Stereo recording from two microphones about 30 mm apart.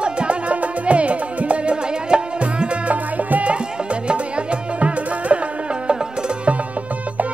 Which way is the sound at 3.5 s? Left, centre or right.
Right.